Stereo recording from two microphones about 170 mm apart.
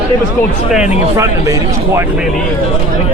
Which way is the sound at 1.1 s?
15° right (ahead or behind).